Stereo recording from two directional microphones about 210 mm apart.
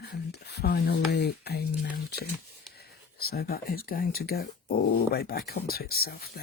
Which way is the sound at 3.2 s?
45° left (ahead or behind).